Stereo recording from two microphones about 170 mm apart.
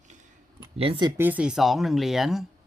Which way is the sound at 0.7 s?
30° right (ahead or behind).